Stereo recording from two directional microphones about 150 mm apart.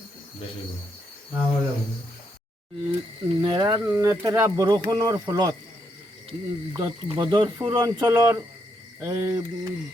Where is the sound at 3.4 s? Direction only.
30° right (ahead or behind).